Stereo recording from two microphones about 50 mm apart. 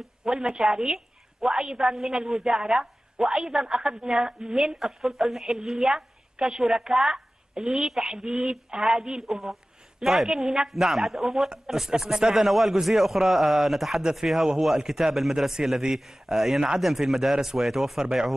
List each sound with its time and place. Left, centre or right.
0.2 s a woman's voice: centre
4.7 s a woman's voice: centre
9.2 s a man's voice: centre
10.7 s a man's voice: centre
18.0 s a woman's voice: centre